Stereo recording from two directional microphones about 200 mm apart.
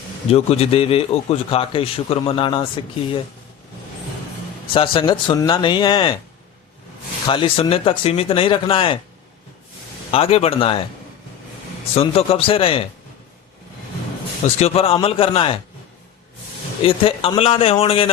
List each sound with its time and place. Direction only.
0.3 s a man's voice: 30° left (ahead or behind)
4.7 s a man's voice: 25° left (ahead or behind)
7.3 s a man's voice: 25° left (ahead or behind)
10.1 s a man's voice: 30° left (ahead or behind)
11.9 s a man's voice: 30° left (ahead or behind)
14.4 s a man's voice: 30° left (ahead or behind)
16.8 s a man's voice: 30° left (ahead or behind)